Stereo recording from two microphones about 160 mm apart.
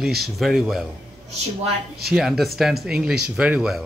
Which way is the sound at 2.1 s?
Centre (ahead or behind).